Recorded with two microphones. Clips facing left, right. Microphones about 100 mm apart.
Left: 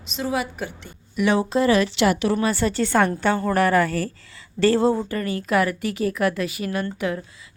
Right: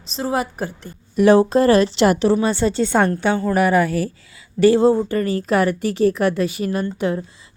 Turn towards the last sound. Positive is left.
turn(degrees=-30)  # may be behind; listen again after turning